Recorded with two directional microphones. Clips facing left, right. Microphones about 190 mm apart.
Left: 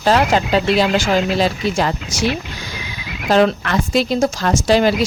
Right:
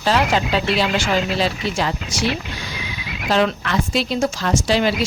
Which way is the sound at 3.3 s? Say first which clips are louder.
Left 4 dB; 45° left (ahead or behind).